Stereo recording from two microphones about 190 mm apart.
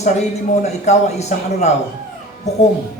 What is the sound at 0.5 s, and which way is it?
A man's voice, 35° left (ahead or behind).